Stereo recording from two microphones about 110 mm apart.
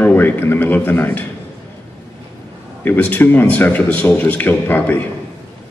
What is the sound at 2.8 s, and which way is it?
A man's voice, 15° left (ahead or behind).